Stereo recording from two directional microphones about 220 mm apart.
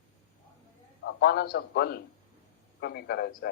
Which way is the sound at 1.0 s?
45° left (ahead or behind).